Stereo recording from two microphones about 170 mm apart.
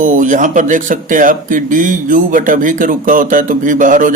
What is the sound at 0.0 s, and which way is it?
Speech, 50° right (ahead or behind).